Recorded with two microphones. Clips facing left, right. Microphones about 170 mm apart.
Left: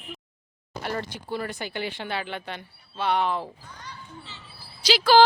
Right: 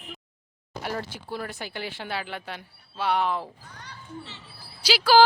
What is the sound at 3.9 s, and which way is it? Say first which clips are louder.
Children playing: right 3 dB; 65° right (ahead or behind).